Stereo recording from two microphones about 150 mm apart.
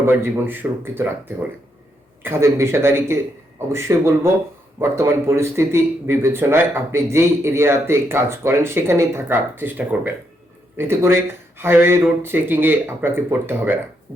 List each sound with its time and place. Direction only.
0.0 s a man's voice: 15° right (ahead or behind)
2.2 s a man's voice: 15° right (ahead or behind)